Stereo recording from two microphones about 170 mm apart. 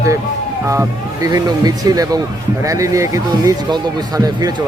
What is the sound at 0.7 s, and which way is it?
Speech, 20° right (ahead or behind).